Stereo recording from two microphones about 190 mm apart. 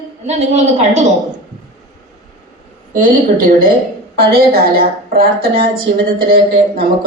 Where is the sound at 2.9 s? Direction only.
45° right (ahead or behind).